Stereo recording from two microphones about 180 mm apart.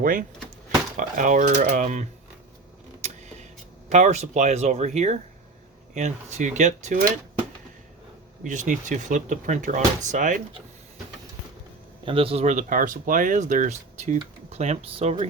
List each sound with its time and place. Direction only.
0.0 s speech: 50° right (ahead or behind)
3.9 s speech: 40° right (ahead or behind)
8.4 s speech: 45° right (ahead or behind)
12.0 s speech: 30° right (ahead or behind)